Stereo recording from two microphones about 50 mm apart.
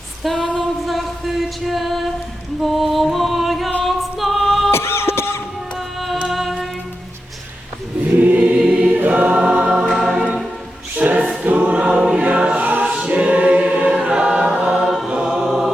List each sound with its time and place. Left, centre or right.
0.2 s female singing: centre
0.5 s music: centre
3.8 s a capella: centre
4.7 s a sound: left
6.3 s music: centre
8.0 s choir: right
9.4 s music: centre
9.9 s choir: centre
10.9 s choir: right
12.5 s choir: right
12.8 s choir: centre
14.8 s choir: centre